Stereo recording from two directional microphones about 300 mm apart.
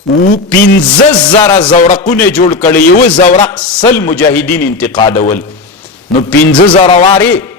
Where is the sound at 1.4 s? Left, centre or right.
Centre.